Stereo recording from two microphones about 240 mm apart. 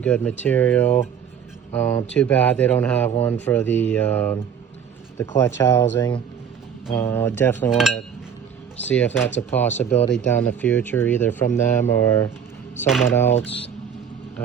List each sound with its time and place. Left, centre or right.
0.0 s speech: centre
12.8 s speech: centre
13.1 s speech: centre
13.4 s speech: left